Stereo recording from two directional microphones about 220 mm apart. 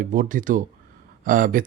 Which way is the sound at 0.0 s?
40° right (ahead or behind).